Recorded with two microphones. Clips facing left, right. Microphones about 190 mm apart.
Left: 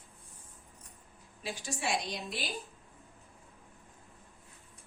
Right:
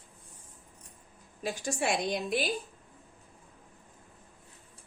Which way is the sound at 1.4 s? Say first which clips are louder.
Right 6 dB; 45° right (ahead or behind).